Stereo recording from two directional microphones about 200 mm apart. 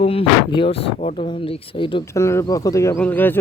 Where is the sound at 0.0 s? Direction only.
30° left (ahead or behind).